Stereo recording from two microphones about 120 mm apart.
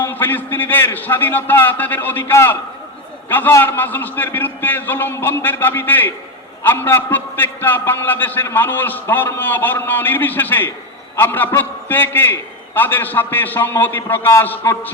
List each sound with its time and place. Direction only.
0.0 s a man's voice: 15° left (ahead or behind)